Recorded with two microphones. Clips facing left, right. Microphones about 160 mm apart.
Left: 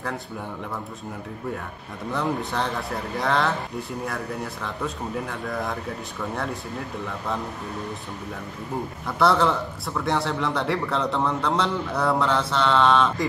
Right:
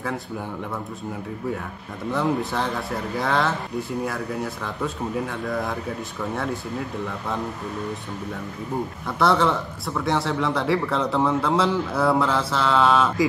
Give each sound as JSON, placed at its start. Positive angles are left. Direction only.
{"t": 2.0, "sound": "a man's voice", "side_deg": 0}
{"t": 9.2, "sound": "a man's voice", "side_deg": 0}